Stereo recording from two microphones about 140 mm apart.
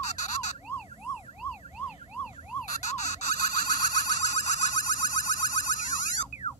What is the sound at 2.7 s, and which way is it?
Car alarm, 55° left (ahead or behind).